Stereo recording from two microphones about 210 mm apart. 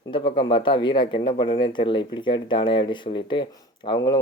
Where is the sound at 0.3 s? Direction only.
25° left (ahead or behind).